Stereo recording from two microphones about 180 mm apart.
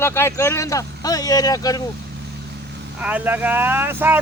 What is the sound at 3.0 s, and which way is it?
Speech, 10° right (ahead or behind).